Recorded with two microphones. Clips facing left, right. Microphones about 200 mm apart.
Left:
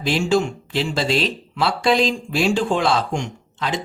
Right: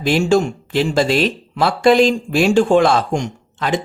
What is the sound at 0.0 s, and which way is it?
Speech, 50° right (ahead or behind).